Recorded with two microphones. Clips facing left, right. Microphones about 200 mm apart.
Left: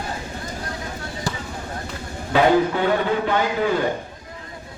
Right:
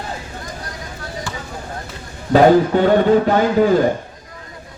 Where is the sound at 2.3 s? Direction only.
40° right (ahead or behind).